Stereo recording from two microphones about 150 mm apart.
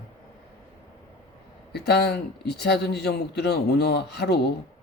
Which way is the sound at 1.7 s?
90° left.